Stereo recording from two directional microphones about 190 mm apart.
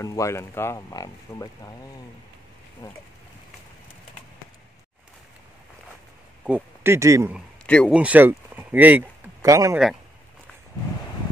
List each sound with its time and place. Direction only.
0.0 s speech: 15° left (ahead or behind)
2.8 s speech: 15° left (ahead or behind)
6.4 s speech: 10° right (ahead or behind)
7.6 s speech: 5° left (ahead or behind)
7.9 s speech: 5° right (ahead or behind)